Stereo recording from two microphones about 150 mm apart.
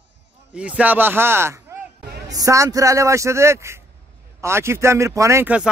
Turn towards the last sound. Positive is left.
turn(degrees=-20)  # may be behind; listen again after turning